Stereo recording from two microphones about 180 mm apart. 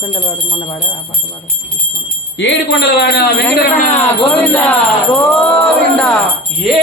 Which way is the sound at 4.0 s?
10° left (ahead or behind).